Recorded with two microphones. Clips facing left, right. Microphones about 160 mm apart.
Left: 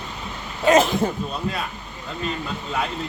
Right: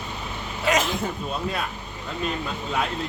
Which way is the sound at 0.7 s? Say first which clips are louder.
Left 7 dB; 30° left (ahead or behind).